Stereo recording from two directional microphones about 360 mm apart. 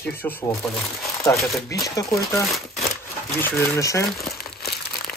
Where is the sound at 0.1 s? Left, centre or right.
Centre.